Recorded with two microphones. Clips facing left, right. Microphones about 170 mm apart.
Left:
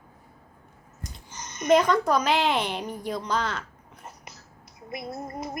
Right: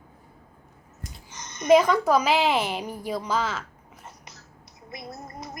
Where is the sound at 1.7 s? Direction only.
5° right (ahead or behind).